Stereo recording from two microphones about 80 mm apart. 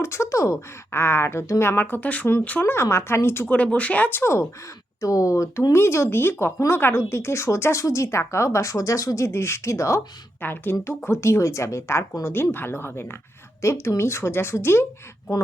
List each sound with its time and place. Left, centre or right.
0.0 s speech: left
0.9 s speech: left
2.6 s speech: left
3.5 s speech: centre; by 10.0 s left
10.4 s speech: left